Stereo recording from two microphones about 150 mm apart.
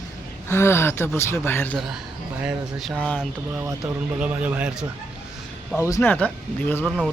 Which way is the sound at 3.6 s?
20° right (ahead or behind).